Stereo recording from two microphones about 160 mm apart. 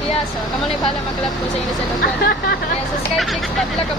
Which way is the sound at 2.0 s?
80° left.